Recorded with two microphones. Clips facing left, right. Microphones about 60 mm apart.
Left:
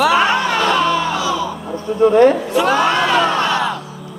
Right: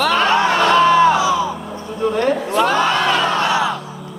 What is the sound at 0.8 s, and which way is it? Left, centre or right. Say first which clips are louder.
Crowd: right 5 dB; right.